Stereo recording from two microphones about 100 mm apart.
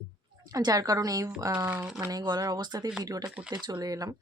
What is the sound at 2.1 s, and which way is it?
Speech, 40° right (ahead or behind).